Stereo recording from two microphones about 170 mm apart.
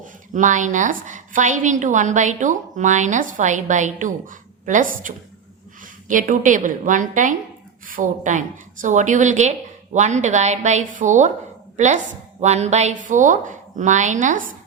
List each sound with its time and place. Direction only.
0.0 s a woman's voice: 45° right (ahead or behind)